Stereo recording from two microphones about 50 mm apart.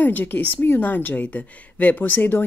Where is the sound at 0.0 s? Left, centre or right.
Left.